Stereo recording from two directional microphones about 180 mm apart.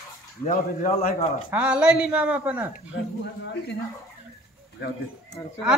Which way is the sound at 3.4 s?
75° left (ahead or behind).